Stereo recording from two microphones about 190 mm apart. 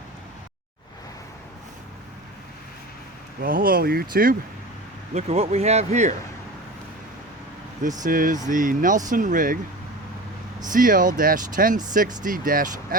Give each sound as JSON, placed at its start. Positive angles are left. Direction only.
{"t": 3.4, "sound": "speech", "side_deg": -50}
{"t": 5.1, "sound": "speech", "side_deg": -35}
{"t": 8.0, "sound": "speech", "side_deg": -45}
{"t": 10.7, "sound": "speech", "side_deg": -45}